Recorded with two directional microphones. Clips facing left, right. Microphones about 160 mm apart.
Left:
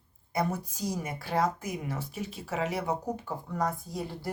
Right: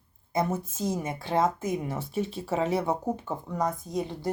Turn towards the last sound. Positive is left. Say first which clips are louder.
# right 4 dB
turn(degrees=-20)  # may be behind; listen again after turning